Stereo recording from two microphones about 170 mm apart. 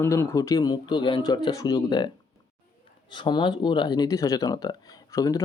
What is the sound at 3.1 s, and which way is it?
Speech, 25° left (ahead or behind).